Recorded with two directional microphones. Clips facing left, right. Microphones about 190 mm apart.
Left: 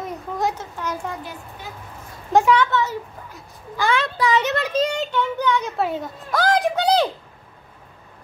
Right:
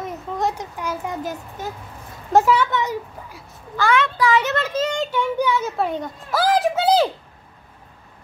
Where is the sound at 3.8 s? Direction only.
15° left (ahead or behind).